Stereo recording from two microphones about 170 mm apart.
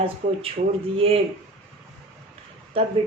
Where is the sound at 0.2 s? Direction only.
40° right (ahead or behind).